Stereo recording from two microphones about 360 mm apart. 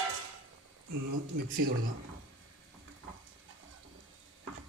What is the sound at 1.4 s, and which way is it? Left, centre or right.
Speech, right.